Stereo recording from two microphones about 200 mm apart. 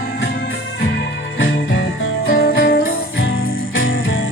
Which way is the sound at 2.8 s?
80° left.